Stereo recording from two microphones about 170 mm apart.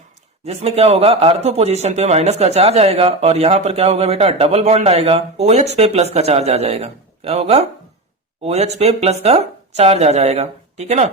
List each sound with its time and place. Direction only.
0.4 s a man's voice: 40° right (ahead or behind)